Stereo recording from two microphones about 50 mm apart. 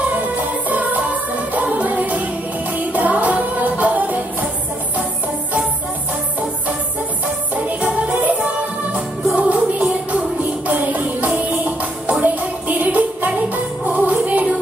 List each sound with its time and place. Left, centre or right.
0.1 s music: right
8.9 s music: right